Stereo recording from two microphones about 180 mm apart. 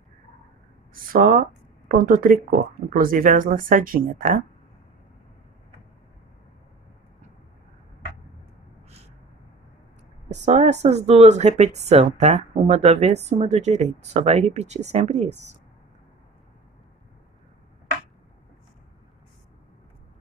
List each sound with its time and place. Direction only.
0.9 s speech: 50° right (ahead or behind)
10.3 s speech: 40° right (ahead or behind)